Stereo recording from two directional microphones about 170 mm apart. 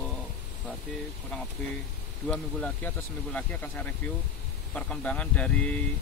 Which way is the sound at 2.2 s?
5° left (ahead or behind).